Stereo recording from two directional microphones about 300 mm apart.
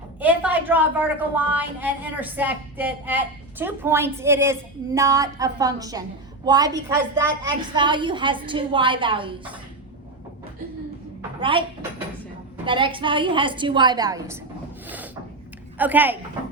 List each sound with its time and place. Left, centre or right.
0.2 s a woman's voice: centre
11.3 s speech: centre
12.6 s a woman's voice: centre
14.8 s wood: centre
15.8 s a woman's voice: centre